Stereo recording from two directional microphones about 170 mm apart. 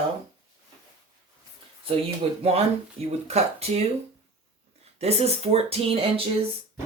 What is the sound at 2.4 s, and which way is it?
Speech, 35° right (ahead or behind).